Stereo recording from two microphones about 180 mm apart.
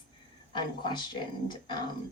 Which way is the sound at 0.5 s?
25° left (ahead or behind).